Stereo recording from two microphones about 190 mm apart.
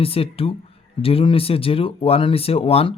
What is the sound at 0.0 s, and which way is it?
Speech, 30° left (ahead or behind).